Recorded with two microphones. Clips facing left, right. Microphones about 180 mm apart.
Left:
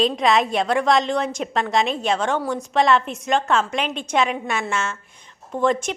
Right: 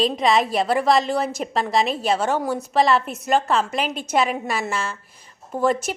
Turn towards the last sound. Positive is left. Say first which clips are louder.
# even
turn(degrees=-5)  # may be behind; listen again after turning